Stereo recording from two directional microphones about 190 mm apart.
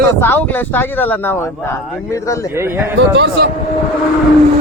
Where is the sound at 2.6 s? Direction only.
15° right (ahead or behind).